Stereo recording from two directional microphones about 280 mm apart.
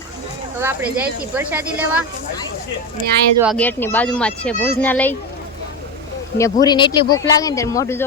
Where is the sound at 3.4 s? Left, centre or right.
Centre.